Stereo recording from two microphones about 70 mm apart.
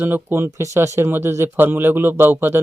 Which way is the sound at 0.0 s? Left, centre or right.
Right.